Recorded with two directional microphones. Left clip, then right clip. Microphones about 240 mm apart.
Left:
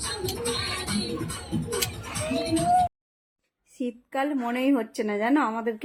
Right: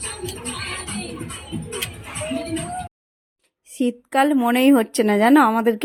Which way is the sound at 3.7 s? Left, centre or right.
Right.